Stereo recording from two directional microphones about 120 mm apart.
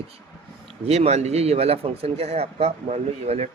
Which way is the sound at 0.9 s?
65° right (ahead or behind).